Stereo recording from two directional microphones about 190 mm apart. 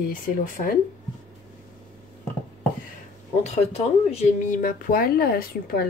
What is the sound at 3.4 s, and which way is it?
Speech, 35° left (ahead or behind).